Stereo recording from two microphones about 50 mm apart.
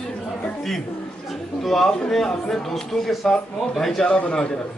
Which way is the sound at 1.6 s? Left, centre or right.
Centre.